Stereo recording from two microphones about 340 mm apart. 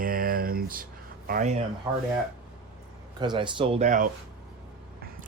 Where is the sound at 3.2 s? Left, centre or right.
Centre.